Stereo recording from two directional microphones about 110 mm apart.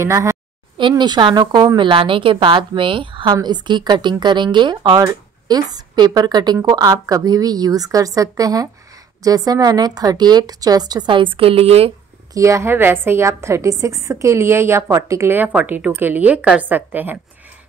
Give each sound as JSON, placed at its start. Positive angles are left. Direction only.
{"t": 0.0, "sound": "a woman's voice", "side_deg": -25}
{"t": 0.7, "sound": "a woman's voice", "side_deg": -45}
{"t": 1.8, "sound": "a woman's voice", "side_deg": -50}
{"t": 11.3, "sound": "a woman's voice", "side_deg": -60}
{"t": 12.4, "sound": "a woman's voice", "side_deg": -25}